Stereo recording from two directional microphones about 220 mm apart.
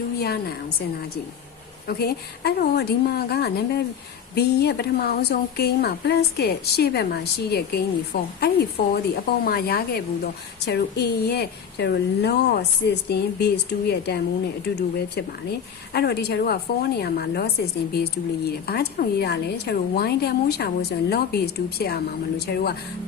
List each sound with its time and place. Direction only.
0.2 s a woman's voice: 45° left (ahead or behind)
1.9 s speech: 45° left (ahead or behind)